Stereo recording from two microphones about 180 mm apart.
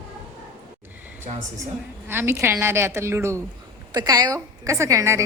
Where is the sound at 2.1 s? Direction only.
10° right (ahead or behind).